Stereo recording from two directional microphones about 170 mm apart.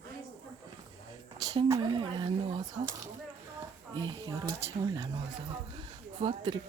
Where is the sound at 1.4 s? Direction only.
20° right (ahead or behind).